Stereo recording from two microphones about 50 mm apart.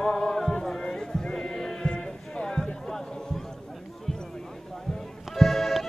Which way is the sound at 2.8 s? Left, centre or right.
Centre.